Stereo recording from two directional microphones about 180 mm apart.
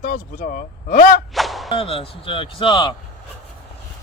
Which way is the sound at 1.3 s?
Centre (ahead or behind).